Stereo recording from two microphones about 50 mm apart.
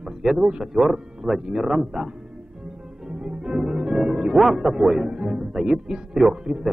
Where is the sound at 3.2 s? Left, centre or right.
Centre.